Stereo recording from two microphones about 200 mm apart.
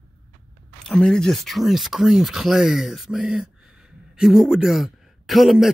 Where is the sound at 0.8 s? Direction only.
5° left (ahead or behind).